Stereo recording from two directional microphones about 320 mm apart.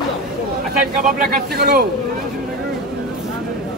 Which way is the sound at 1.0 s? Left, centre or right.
Right.